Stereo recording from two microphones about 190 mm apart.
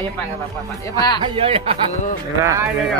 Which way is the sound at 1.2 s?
30° right (ahead or behind).